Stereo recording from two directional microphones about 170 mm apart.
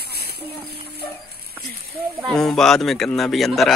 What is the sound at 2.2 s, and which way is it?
Speech, centre (ahead or behind).